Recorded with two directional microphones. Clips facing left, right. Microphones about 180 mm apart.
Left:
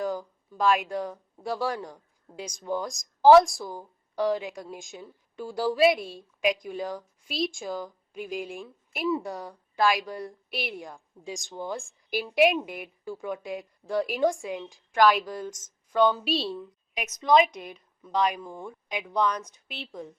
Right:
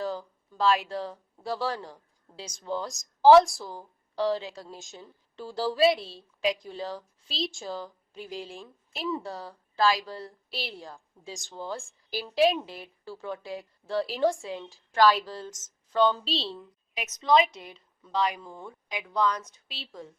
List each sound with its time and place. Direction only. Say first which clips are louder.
0.0 s a woman's voice: left 2 dB; 15° left (ahead or behind)